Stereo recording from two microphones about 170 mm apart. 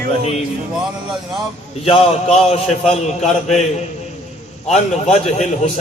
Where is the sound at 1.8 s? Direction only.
40° left (ahead or behind).